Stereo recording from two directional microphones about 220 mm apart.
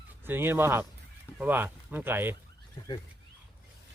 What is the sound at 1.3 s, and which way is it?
Speech, 10° right (ahead or behind).